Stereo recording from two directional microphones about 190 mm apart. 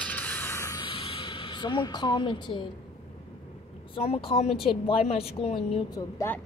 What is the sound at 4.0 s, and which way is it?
Speech, 30° left (ahead or behind).